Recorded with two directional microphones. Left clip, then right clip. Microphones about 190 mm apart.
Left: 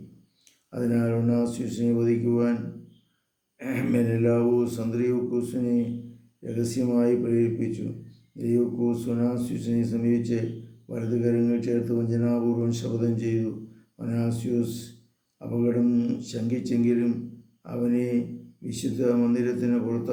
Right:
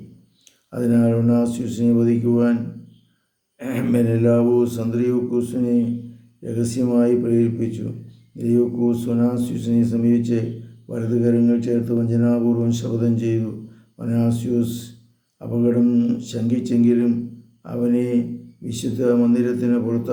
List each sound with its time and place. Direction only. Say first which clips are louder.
0.7 s mantra: right 7 dB; 20° right (ahead or behind)
3.6 s mantra: right 5 dB; 20° right (ahead or behind)
8.4 s speech: right 6 dB; 20° right (ahead or behind)
10.9 s mantra: right 6 dB; 20° right (ahead or behind)
14.0 s speech: right 7 dB; 20° right (ahead or behind)
15.4 s mantra: right 6 dB; 15° right (ahead or behind)